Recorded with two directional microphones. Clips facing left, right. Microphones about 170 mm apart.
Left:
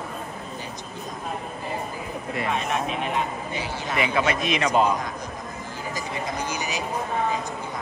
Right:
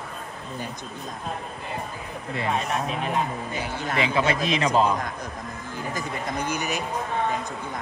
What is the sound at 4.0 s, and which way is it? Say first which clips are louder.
Speech: even; 30° right (ahead or behind).